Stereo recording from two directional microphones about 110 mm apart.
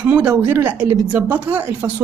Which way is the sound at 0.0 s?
10° right (ahead or behind).